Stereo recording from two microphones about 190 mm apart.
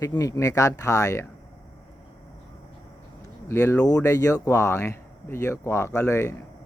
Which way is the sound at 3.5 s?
15° left (ahead or behind).